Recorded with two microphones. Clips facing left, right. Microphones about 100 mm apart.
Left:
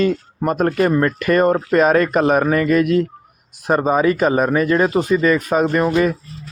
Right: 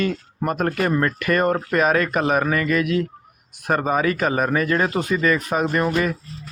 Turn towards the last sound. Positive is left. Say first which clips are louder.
# left 5 dB
turn(degrees=25)  # may be behind; listen again after turning